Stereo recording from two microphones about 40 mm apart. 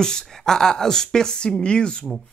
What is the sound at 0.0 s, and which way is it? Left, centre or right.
Speech, centre.